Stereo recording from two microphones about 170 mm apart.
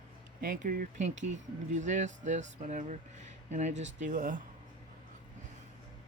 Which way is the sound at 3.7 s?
90° right.